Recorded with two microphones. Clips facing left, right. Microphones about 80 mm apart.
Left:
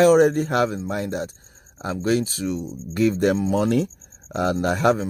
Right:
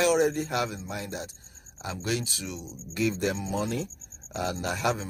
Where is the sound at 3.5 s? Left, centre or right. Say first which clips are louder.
Left 10 dB; left.